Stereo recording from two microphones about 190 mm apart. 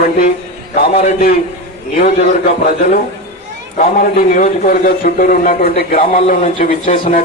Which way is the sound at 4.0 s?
45° left (ahead or behind).